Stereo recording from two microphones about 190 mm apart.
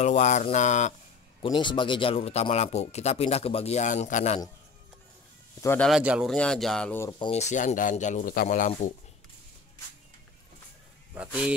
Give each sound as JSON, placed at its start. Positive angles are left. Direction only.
{"t": 0.0, "sound": "speech", "side_deg": 35}
{"t": 1.4, "sound": "speech", "side_deg": 25}
{"t": 5.6, "sound": "speech", "side_deg": 10}
{"t": 5.9, "sound": "speech", "side_deg": -5}
{"t": 7.2, "sound": "speech", "side_deg": 35}
{"t": 11.1, "sound": "speech", "side_deg": -5}